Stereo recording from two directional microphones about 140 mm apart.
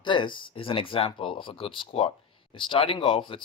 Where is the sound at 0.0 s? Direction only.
35° left (ahead or behind).